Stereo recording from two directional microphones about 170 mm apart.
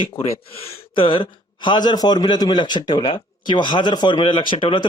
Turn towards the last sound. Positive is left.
turn(degrees=30)  # may be behind; listen again after turning